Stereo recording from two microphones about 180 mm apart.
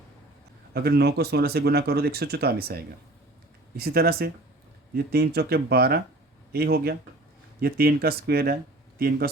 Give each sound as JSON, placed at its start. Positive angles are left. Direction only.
{"t": 0.7, "sound": "speech", "side_deg": -65}